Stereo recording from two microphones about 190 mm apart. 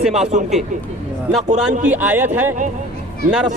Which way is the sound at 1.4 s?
40° right (ahead or behind).